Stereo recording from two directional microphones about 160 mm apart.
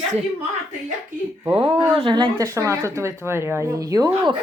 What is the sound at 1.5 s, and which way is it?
Speech, 30° right (ahead or behind).